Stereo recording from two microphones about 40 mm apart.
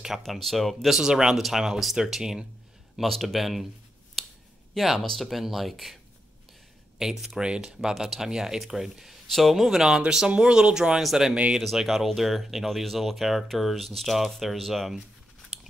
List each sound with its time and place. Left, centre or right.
0.2 s speech: centre
0.9 s speech: centre
3.0 s speech: centre
4.7 s speech: centre
7.0 s speech: centre
7.3 s speech: right
7.6 s speech: centre
10.0 s speech: centre